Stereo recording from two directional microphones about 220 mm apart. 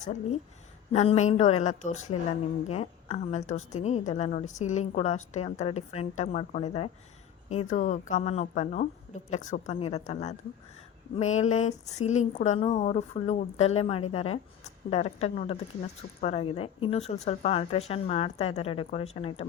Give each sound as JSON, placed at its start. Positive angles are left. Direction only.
{"t": 0.0, "sound": "a woman's voice", "side_deg": 35}